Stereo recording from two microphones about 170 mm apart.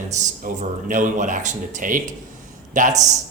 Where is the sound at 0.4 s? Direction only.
50° right (ahead or behind).